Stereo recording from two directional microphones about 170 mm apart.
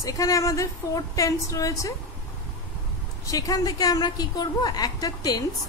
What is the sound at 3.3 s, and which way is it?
A woman's voice, 20° left (ahead or behind).